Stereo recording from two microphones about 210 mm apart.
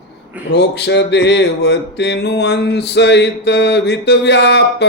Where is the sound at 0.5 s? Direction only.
55° left (ahead or behind).